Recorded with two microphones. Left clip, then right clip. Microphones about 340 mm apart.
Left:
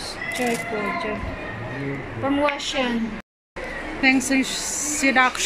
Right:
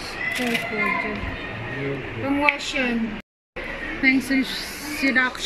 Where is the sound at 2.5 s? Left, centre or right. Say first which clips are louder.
Even; centre.